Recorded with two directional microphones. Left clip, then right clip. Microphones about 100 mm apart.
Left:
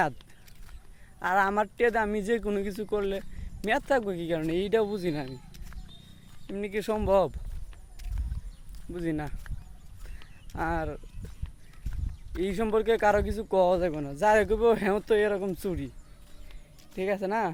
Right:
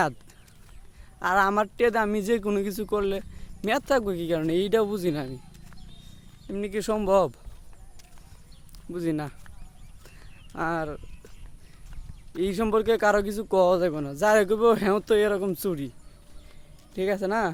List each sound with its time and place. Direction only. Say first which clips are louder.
1.2 s speech: right 3 dB; 35° right (ahead or behind)
6.5 s speech: right 2 dB; 35° right (ahead or behind)
8.9 s speech: right 3 dB; 40° right (ahead or behind)
10.5 s speech: right 2 dB; 30° right (ahead or behind)
12.4 s speech: right 3 dB; 35° right (ahead or behind)
16.9 s speech: right 3 dB; 40° right (ahead or behind)